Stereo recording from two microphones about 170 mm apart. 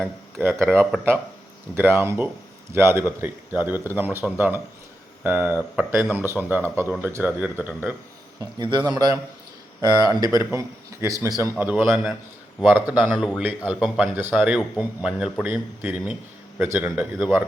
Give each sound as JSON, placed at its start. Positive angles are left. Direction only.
{"t": 0.6, "sound": "a man's voice", "side_deg": -15}
{"t": 8.4, "sound": "a man's voice", "side_deg": -25}